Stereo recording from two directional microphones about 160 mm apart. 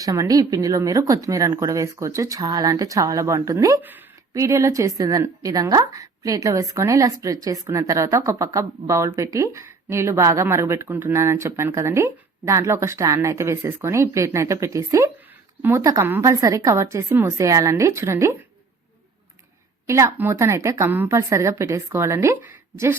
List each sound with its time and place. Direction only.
0.0 s a woman's voice: 20° right (ahead or behind)
19.9 s a woman's voice: 15° right (ahead or behind)